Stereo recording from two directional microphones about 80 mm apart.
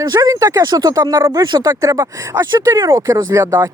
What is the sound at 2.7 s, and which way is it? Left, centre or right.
Speech, right.